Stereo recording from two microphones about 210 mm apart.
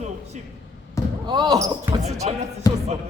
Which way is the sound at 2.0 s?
30° right (ahead or behind).